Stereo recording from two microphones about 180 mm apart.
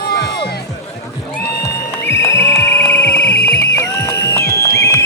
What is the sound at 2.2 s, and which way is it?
Music, 15° left (ahead or behind).